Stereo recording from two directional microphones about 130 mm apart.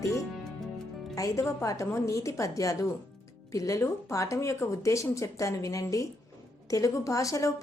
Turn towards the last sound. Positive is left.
turn(degrees=25)  # may be behind; listen again after turning